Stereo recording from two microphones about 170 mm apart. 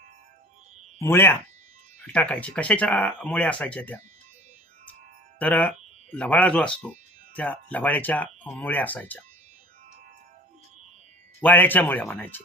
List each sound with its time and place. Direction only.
0.9 s speech: 15° left (ahead or behind)
5.4 s speech: 10° left (ahead or behind)
11.3 s speech: 10° left (ahead or behind)